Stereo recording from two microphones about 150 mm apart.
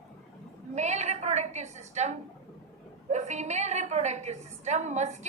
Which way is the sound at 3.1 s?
50° right (ahead or behind).